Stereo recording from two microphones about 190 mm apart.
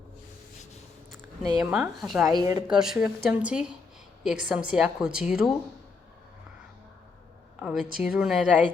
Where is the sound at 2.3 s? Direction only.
20° right (ahead or behind).